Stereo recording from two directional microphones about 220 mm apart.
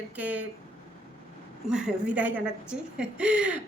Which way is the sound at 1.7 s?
5° right (ahead or behind).